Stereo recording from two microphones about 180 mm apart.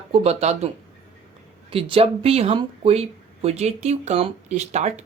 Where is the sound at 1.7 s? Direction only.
30° right (ahead or behind).